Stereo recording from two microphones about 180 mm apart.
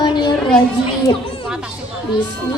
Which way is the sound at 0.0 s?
25° left (ahead or behind).